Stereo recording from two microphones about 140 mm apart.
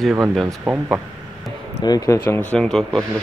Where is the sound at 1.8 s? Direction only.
25° left (ahead or behind).